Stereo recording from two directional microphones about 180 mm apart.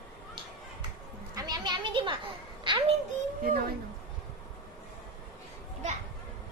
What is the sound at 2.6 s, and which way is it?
Music, 25° right (ahead or behind).